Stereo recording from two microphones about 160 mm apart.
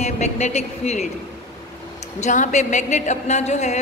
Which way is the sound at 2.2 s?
50° left (ahead or behind).